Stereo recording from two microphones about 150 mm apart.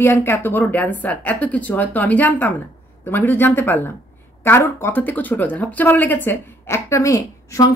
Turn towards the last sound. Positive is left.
turn(degrees=20)  # may be behind; listen again after turning